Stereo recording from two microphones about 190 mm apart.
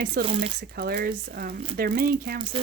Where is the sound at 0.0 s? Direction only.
55° right (ahead or behind).